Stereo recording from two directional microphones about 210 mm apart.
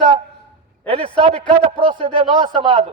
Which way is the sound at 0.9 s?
30° right (ahead or behind).